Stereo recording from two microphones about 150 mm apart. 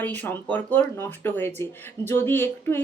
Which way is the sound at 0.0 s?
10° left (ahead or behind).